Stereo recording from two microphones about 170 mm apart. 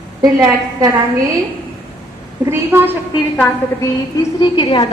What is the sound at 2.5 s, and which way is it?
Speech, 15° right (ahead or behind).